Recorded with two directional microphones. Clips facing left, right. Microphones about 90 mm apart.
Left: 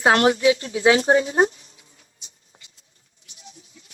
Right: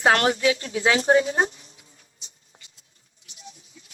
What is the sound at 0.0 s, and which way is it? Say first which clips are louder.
Speech: left 3 dB; 25° left (ahead or behind).